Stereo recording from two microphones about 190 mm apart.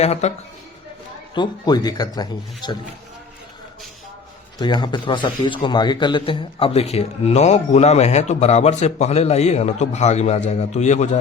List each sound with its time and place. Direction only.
0.0 s a man's voice: 35° left (ahead or behind)
1.4 s speech: 20° left (ahead or behind)
4.5 s a man's voice: 25° left (ahead or behind)